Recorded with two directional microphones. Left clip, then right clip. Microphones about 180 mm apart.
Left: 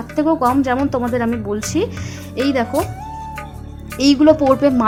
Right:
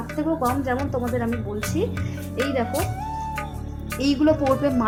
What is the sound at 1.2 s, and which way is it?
Speech, centre (ahead or behind).